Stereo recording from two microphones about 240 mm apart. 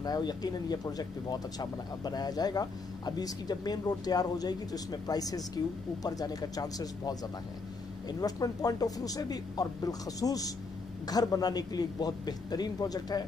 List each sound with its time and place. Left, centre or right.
0.0 s speech: centre
8.2 s speech: centre